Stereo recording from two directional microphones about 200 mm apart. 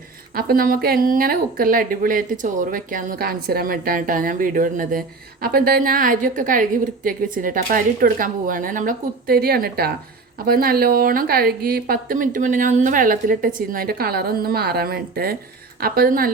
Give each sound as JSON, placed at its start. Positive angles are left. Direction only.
{"t": 0.3, "sound": "speech", "side_deg": -50}